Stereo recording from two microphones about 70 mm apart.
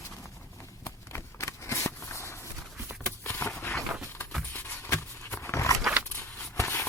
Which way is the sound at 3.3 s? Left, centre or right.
Left.